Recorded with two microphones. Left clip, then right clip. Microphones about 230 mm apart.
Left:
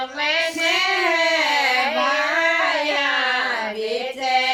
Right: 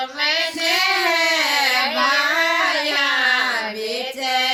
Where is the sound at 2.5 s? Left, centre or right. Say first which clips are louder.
Right 1 dB; right.